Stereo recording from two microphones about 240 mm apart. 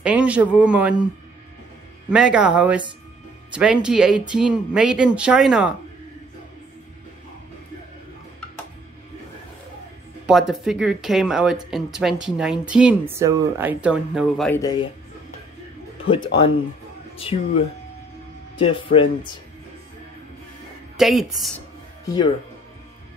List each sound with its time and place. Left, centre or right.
0.0 s speech: centre
2.0 s speech: centre
10.2 s speech: centre
14.6 s speech: centre
17.2 s speech: left
21.0 s speech: centre
22.0 s speech: centre